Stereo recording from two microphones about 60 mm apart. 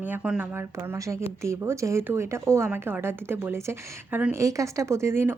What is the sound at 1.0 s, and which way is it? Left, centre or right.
A woman's voice, right.